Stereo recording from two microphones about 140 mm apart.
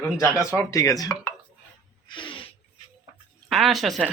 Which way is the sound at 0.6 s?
20° left (ahead or behind).